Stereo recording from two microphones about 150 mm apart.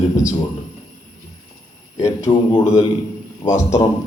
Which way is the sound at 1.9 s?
20° left (ahead or behind).